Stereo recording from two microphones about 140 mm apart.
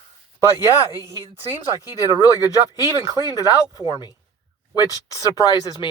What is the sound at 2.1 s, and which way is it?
Speech, 20° right (ahead or behind).